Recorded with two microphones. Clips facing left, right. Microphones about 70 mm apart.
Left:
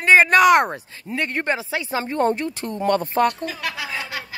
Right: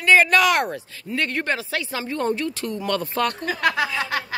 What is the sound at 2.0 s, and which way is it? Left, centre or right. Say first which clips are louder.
Speech: left 4 dB; left.